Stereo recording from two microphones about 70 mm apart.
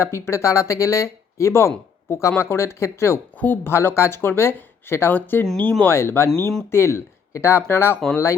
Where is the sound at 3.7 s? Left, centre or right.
Left.